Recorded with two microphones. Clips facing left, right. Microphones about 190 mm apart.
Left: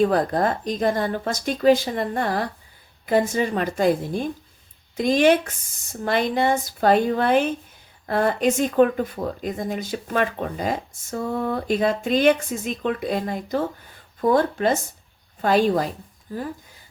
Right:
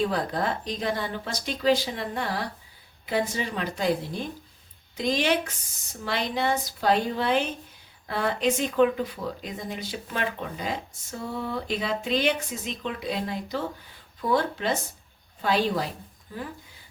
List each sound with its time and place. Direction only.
0.0 s speech: 50° left (ahead or behind)